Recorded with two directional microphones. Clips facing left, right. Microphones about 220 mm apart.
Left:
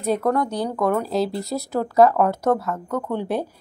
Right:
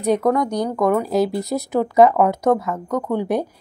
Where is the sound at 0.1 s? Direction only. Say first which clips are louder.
Right 3 dB; 15° right (ahead or behind).